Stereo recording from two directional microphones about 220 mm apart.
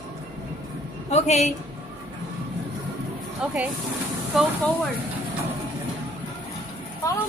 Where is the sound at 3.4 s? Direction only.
5° right (ahead or behind).